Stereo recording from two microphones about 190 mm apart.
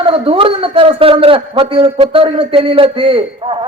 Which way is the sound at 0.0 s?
30° right (ahead or behind).